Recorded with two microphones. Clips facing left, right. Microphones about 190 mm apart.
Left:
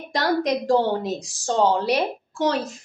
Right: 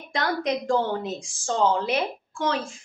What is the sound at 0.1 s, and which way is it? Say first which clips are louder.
A woman's voice: left 4 dB; 40° left (ahead or behind).